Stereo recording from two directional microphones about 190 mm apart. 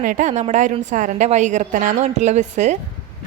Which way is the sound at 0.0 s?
45° right (ahead or behind).